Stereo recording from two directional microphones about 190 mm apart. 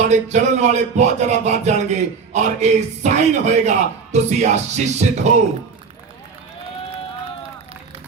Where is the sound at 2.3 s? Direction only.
35° right (ahead or behind).